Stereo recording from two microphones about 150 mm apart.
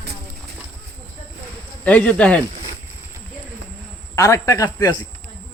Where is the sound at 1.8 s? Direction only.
10° left (ahead or behind).